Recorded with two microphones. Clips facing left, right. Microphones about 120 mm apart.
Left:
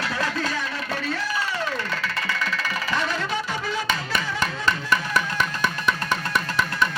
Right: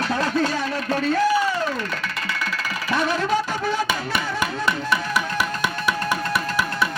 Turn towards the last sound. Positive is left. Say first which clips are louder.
# right 1 dB
turn(degrees=-10)  # may be behind; listen again after turning